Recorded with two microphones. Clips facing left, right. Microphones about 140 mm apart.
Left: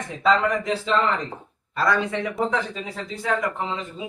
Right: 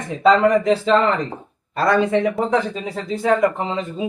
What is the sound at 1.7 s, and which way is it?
Speech, 65° right (ahead or behind).